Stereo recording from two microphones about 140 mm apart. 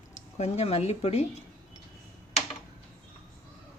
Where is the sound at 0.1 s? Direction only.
50° left (ahead or behind).